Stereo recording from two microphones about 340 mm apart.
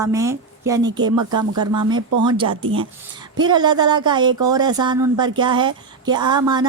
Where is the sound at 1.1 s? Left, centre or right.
Right.